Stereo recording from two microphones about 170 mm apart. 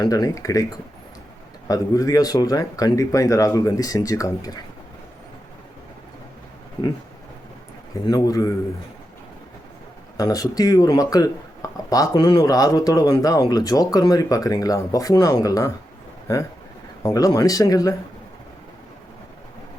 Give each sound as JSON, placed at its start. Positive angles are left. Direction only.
{"t": 0.0, "sound": "speech", "side_deg": 20}
{"t": 1.6, "sound": "speech", "side_deg": 20}
{"t": 8.0, "sound": "speech", "side_deg": 20}
{"t": 10.2, "sound": "speech", "side_deg": 20}